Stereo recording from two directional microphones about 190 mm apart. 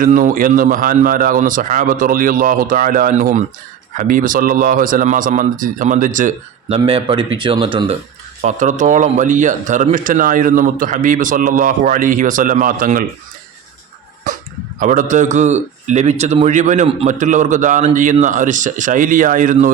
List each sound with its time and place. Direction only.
0.0 s a man's voice: 45° right (ahead or behind); by 7.9 s 25° right (ahead or behind)
8.4 s a man's voice: 40° right (ahead or behind)
14.3 s a sound: 40° right (ahead or behind)
14.8 s a man's voice: 45° right (ahead or behind)